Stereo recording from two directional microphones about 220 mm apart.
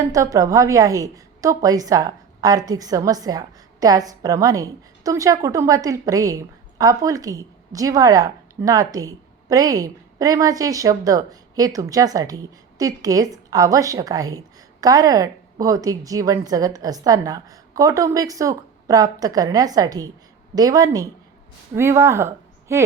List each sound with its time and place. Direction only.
0.1 s a woman's voice: 15° right (ahead or behind)